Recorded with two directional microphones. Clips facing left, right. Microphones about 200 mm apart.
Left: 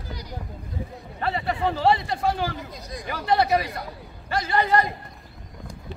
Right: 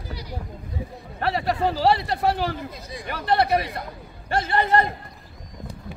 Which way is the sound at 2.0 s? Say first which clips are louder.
Right 2 dB; 65° right (ahead or behind).